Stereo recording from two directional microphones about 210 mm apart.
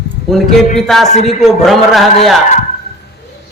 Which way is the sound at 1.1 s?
30° left (ahead or behind).